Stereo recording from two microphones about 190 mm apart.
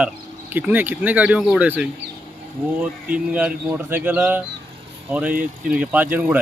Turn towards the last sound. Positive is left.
turn(degrees=-10)  # may be behind; listen again after turning